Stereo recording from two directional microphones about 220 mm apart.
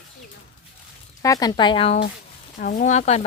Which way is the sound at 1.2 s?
15° left (ahead or behind).